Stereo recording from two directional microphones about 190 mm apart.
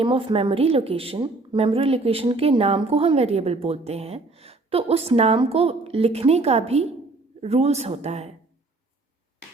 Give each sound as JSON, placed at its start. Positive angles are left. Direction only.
{"t": 0.0, "sound": "a woman's voice", "side_deg": -25}